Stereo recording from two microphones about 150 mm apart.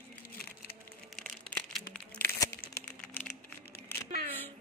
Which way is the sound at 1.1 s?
5° left (ahead or behind).